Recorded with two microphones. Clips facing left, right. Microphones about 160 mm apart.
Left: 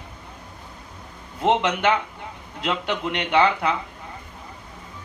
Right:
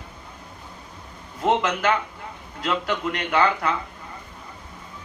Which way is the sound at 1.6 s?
25° left (ahead or behind).